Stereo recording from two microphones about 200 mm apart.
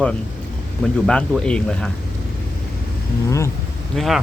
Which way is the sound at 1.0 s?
5° left (ahead or behind).